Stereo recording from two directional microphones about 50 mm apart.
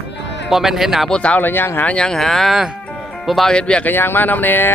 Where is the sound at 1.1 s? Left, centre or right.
Left.